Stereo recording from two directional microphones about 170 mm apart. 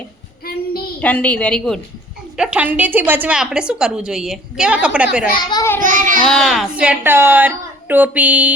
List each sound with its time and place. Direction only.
1.0 s a woman's voice: 10° left (ahead or behind)
5.4 s a child's voice: 25° left (ahead or behind)
5.8 s child singing: 50° right (ahead or behind)
6.2 s speech: centre (ahead or behind)